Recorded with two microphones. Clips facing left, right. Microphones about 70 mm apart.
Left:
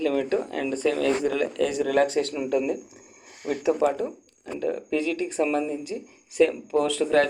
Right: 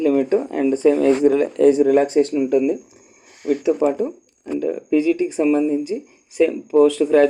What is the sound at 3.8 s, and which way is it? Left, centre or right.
Speech, centre.